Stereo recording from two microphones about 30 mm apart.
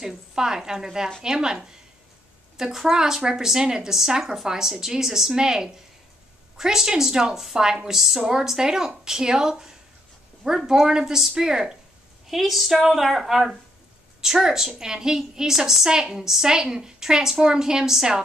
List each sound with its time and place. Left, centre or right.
0.3 s a woman's voice: right
8.0 s a woman's voice: centre
8.3 s a woman's voice: centre
12.3 s a woman's voice: centre
14.2 s a woman's voice: centre